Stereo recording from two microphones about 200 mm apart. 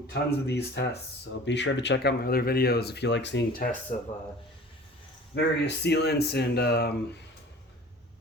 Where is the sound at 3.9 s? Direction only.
45° left (ahead or behind).